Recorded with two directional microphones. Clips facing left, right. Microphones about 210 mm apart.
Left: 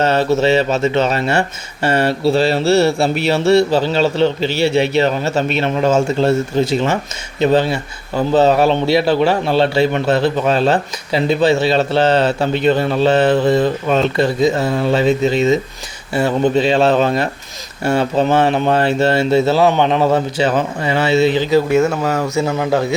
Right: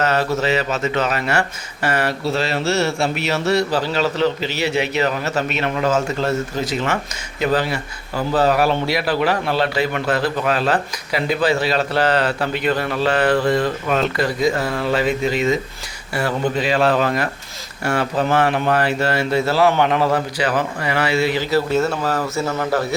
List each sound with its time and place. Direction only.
0.0 s speech: 30° left (ahead or behind); by 23.0 s 15° left (ahead or behind)